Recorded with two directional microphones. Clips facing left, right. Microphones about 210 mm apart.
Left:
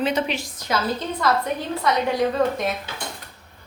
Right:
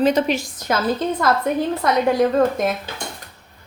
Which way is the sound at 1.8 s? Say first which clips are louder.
Right 1 dB; 50° right (ahead or behind).